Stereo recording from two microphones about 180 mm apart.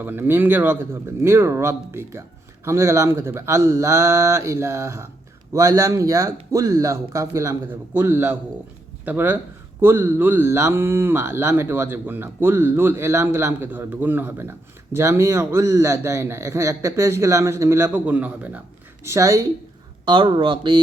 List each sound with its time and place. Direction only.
0.0 s speech: 10° right (ahead or behind); by 20.7 s 25° right (ahead or behind)